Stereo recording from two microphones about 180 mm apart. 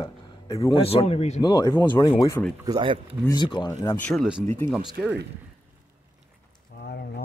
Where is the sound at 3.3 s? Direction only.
25° left (ahead or behind).